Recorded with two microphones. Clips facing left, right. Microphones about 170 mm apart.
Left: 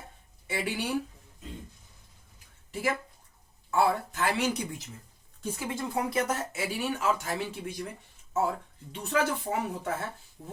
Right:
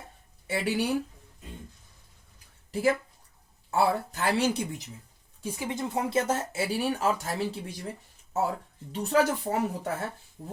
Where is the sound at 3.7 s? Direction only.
35° right (ahead or behind).